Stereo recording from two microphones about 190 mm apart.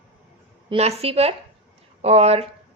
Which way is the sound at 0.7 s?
35° right (ahead or behind).